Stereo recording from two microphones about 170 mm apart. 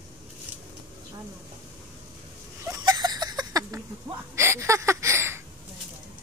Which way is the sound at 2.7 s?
20° right (ahead or behind).